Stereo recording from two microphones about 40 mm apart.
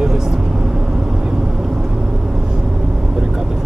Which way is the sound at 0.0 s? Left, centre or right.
Centre.